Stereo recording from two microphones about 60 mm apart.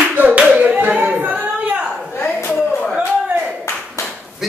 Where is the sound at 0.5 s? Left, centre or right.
Right.